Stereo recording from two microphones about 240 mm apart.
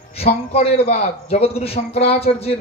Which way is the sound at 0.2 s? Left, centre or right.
Left.